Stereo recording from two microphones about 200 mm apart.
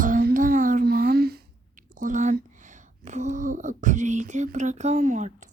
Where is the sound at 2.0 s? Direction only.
40° right (ahead or behind).